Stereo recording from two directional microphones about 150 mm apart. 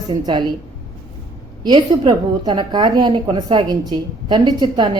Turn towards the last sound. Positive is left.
turn(degrees=-30)  # may be behind; listen again after turning